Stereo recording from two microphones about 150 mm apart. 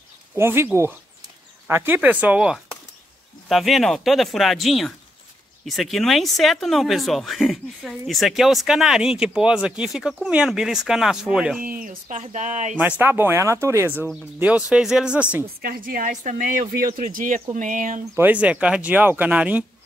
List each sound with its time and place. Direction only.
0.4 s speech: 15° right (ahead or behind)
11.6 s speech: 70° right (ahead or behind)
12.2 s speech: 55° right (ahead or behind)
13.0 s speech: 15° right (ahead or behind)
15.6 s speech: 75° right (ahead or behind); by 18.0 s 60° right (ahead or behind)
18.1 s speech: 10° right (ahead or behind)